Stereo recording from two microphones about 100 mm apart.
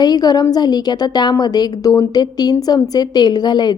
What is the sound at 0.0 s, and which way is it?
A woman's voice, 40° left (ahead or behind).